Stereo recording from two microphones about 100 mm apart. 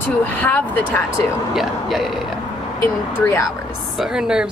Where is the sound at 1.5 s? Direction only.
Centre (ahead or behind).